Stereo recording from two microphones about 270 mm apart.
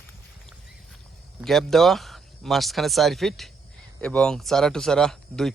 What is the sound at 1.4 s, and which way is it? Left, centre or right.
A man's voice, centre.